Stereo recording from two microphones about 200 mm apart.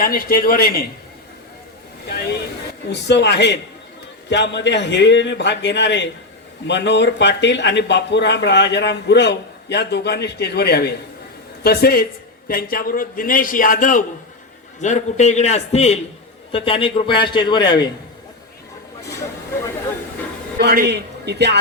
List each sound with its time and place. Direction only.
0.0 s a man's voice: 50° left (ahead or behind)
2.9 s a man's voice: 60° left (ahead or behind); by 17.8 s 20° left (ahead or behind)
20.6 s a man's voice: 50° right (ahead or behind)